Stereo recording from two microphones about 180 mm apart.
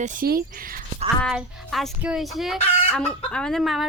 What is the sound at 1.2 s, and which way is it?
Music, centre (ahead or behind).